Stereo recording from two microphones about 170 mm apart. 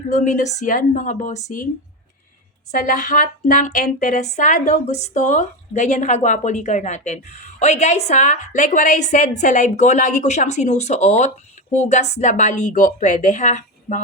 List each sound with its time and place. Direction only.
0.1 s speech: 45° left (ahead or behind)
2.7 s speech: 50° left (ahead or behind)